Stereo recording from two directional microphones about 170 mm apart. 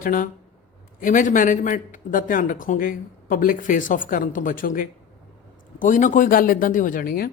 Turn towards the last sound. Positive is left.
turn(degrees=60)  # may be behind; listen again after turning